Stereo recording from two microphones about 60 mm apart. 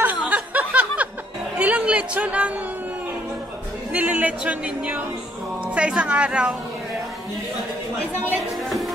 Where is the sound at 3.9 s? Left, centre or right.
Right.